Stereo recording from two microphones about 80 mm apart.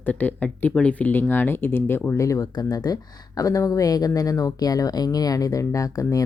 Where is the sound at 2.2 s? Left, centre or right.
Left.